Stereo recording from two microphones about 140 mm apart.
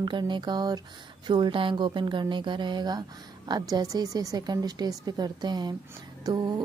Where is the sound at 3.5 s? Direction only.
25° right (ahead or behind).